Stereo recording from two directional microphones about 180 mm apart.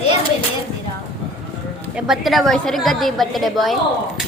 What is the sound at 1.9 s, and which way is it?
A woman's voice, centre (ahead or behind).